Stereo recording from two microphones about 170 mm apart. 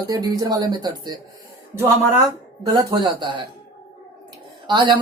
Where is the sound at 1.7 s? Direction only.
15° right (ahead or behind).